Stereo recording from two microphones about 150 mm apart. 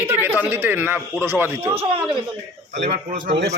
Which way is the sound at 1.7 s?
40° right (ahead or behind).